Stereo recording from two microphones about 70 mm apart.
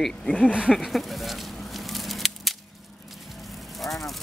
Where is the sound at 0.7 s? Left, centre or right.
Centre.